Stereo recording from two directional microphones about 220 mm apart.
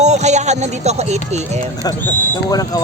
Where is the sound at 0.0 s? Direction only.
30° right (ahead or behind).